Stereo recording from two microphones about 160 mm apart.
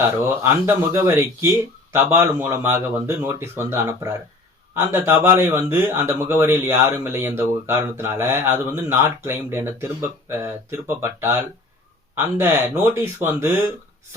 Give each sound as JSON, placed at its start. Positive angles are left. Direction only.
{"t": 0.3, "sound": "speech", "side_deg": -15}